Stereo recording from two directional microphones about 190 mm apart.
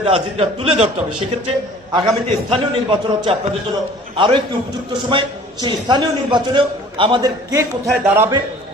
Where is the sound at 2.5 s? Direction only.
25° right (ahead or behind).